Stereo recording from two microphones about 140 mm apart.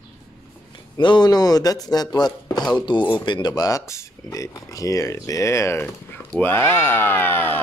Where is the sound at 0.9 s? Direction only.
35° left (ahead or behind).